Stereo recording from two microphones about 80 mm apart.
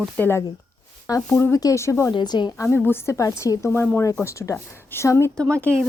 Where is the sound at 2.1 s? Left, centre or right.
Left.